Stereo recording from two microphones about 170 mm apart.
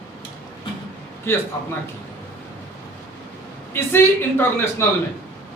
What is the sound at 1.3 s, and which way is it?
Speech, 15° left (ahead or behind).